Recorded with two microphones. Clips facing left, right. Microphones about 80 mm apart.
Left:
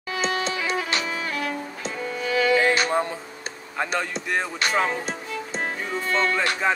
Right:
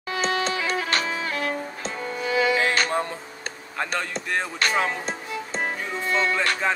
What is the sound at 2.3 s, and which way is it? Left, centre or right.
Music, right.